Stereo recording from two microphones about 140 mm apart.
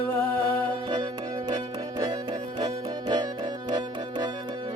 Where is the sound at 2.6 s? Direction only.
30° right (ahead or behind).